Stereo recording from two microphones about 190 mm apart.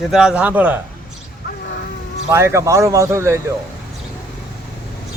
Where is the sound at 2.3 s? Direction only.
15° right (ahead or behind).